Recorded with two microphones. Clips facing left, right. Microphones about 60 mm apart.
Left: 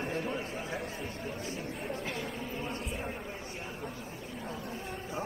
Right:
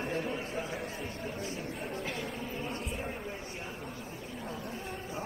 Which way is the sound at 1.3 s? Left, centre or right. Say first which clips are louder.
Even; left.